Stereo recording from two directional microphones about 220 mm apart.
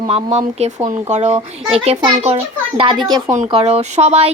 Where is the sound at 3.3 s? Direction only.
30° right (ahead or behind).